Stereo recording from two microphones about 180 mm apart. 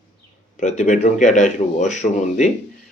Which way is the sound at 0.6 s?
40° left (ahead or behind).